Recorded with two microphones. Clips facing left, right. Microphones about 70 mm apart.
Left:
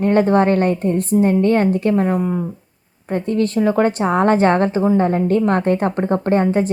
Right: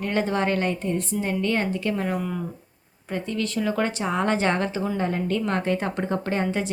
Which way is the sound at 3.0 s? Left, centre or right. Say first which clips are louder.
Left 9 dB; left.